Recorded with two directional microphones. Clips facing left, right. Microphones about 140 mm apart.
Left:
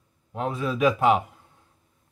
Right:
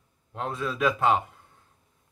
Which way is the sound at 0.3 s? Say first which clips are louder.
Left 3 dB; 10° left (ahead or behind).